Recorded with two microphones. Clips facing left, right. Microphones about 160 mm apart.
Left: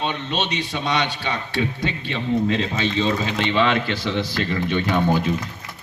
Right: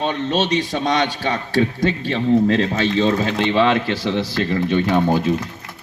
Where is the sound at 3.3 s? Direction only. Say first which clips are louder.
Right 3 dB; 35° right (ahead or behind).